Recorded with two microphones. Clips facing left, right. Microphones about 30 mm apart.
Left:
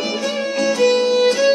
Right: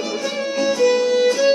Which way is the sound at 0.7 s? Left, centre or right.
Left.